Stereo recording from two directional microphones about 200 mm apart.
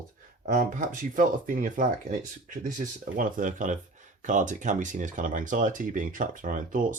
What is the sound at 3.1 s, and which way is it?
Speech, 40° right (ahead or behind).